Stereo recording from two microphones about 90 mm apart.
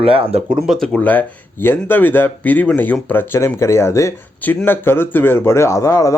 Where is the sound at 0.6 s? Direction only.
5° left (ahead or behind).